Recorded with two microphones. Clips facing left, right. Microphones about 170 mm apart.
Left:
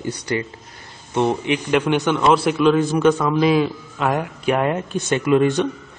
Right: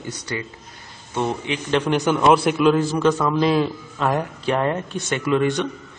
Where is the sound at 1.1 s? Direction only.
20° left (ahead or behind).